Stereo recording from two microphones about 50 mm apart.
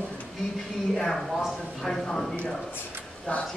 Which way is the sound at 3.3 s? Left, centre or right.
Left.